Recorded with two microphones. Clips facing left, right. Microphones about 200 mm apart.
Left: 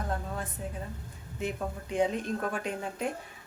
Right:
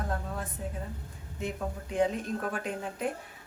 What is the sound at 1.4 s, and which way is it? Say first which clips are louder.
Speech: left 1 dB; centre (ahead or behind).